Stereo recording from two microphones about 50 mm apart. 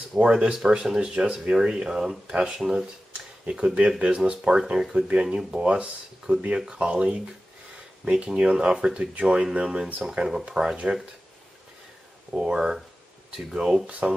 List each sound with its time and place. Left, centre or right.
0.1 s speech: centre
3.5 s speech: right
12.3 s speech: centre